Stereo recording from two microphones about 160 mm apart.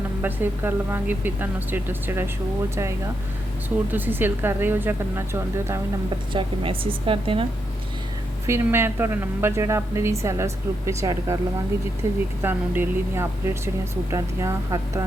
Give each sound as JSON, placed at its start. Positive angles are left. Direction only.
{"t": 0.2, "sound": "speech", "side_deg": -10}
{"t": 3.9, "sound": "speech", "side_deg": -10}
{"t": 6.3, "sound": "a woman's voice", "side_deg": -35}
{"t": 8.4, "sound": "speech", "side_deg": -15}